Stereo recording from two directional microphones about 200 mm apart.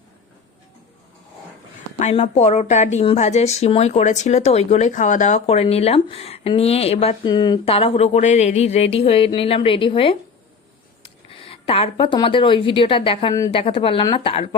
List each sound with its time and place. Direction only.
2.0 s a woman's voice: 35° left (ahead or behind)